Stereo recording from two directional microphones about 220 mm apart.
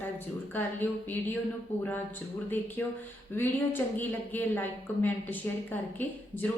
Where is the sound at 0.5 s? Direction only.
10° left (ahead or behind).